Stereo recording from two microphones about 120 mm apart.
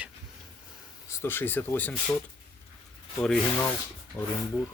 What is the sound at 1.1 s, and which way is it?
Speech, 20° left (ahead or behind).